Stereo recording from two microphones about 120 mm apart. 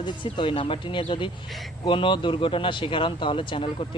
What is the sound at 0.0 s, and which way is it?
Speech, 40° left (ahead or behind).